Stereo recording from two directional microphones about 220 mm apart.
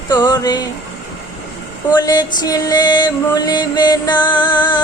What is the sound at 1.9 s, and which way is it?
Speech, 15° left (ahead or behind).